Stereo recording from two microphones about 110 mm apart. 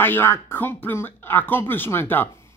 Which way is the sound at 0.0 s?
20° left (ahead or behind).